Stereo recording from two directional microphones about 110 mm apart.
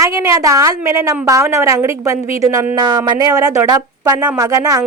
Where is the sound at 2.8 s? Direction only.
40° right (ahead or behind).